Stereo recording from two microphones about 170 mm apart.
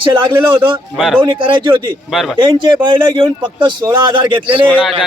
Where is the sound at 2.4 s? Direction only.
30° right (ahead or behind).